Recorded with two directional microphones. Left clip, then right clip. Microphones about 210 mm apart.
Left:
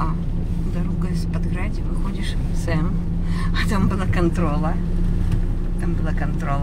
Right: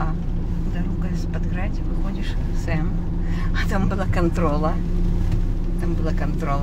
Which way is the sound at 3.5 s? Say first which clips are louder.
Left 1 dB; 15° left (ahead or behind).